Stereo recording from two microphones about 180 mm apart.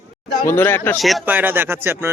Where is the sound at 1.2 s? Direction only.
10° right (ahead or behind).